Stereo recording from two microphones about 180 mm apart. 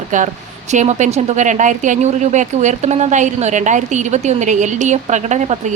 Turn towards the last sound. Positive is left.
turn(degrees=-40)  # may be behind; listen again after turning